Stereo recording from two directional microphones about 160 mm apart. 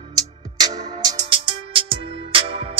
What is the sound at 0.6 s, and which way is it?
Music, 25° right (ahead or behind).